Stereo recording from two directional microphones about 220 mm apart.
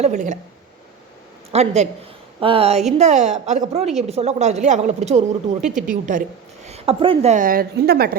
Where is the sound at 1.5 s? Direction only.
30° right (ahead or behind).